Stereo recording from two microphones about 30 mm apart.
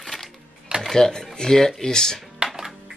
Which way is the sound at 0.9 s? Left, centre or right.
Left.